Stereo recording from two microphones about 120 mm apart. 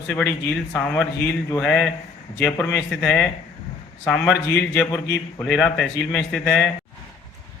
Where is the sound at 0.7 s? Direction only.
5° left (ahead or behind).